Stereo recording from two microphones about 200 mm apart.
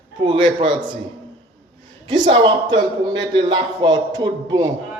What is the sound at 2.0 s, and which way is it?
A man's voice, 25° right (ahead or behind).